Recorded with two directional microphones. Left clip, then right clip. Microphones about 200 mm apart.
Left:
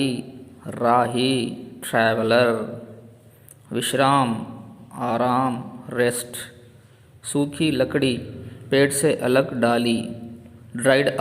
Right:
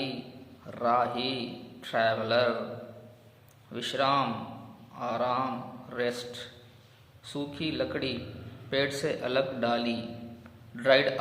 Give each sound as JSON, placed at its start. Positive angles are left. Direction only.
{"t": 0.6, "sound": "a man's voice", "side_deg": 40}
{"t": 3.7, "sound": "a man's voice", "side_deg": 35}